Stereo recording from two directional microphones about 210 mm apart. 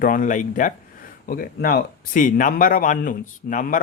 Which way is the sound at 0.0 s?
40° left (ahead or behind).